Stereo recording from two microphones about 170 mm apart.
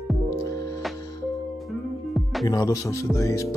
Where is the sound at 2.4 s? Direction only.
20° left (ahead or behind).